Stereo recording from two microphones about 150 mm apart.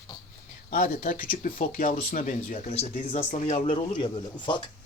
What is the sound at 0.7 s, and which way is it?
Speech, 65° left (ahead or behind).